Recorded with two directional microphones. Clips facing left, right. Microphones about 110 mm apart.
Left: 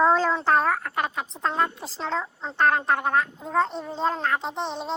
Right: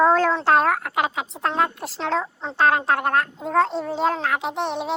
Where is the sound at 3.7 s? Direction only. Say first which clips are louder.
Right 4 dB; 85° right.